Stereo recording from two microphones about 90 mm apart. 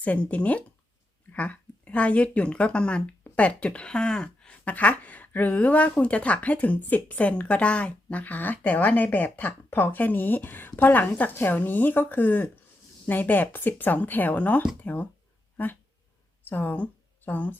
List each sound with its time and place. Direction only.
0.0 s speech: 15° left (ahead or behind)